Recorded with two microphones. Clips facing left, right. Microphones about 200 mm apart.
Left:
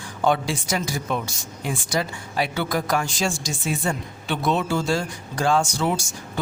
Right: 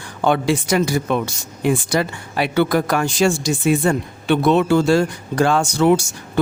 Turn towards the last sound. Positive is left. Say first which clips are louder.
# right 11 dB
turn(degrees=-65)  # may be behind; listen again after turning